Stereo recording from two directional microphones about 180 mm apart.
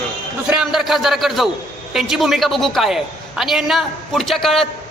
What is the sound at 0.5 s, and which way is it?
A man's voice, 5° right (ahead or behind).